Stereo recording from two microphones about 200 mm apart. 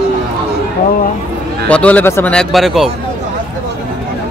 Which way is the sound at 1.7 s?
5° left (ahead or behind).